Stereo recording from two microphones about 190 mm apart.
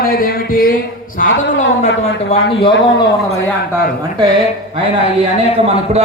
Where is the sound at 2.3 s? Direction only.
25° left (ahead or behind).